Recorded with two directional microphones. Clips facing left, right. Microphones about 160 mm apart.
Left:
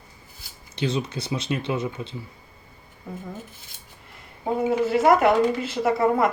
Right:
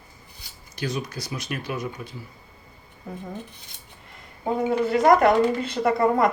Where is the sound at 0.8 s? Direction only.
25° left (ahead or behind).